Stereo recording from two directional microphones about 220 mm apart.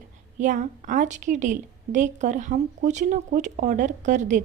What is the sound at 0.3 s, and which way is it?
A woman's voice, 35° right (ahead or behind).